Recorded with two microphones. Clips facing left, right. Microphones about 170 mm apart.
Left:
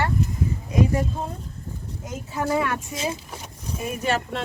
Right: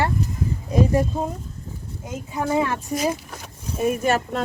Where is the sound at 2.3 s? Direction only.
25° right (ahead or behind).